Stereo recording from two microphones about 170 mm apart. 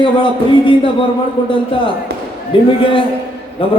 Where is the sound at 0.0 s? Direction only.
30° left (ahead or behind).